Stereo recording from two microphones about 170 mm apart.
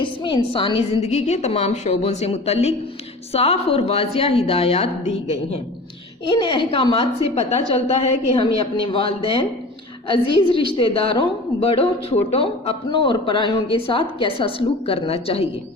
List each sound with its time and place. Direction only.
0.0 s speech: 30° left (ahead or behind)